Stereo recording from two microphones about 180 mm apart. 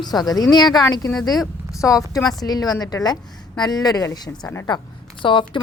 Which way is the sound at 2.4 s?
20° left (ahead or behind).